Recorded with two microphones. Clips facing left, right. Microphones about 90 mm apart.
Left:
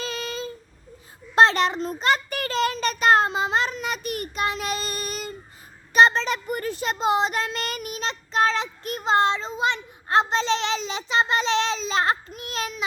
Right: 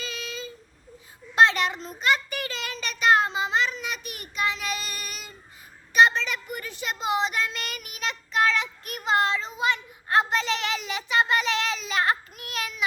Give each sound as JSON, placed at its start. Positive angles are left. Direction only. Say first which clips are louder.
{"t": 0.0, "sound": "a sound", "louder": "left 5 dB", "side_deg": 45}
{"t": 1.4, "sound": "child singing", "louder": "left 3 dB", "side_deg": 40}
{"t": 5.9, "sound": "speech", "louder": "left 2 dB", "side_deg": 35}